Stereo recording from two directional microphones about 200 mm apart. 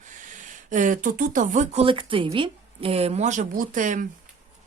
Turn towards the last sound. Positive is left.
turn(degrees=-40)  # may be behind; listen again after turning